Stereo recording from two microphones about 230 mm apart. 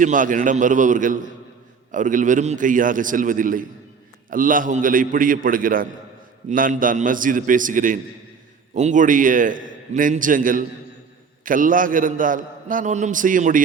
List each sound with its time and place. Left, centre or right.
0.0 s a man's voice: right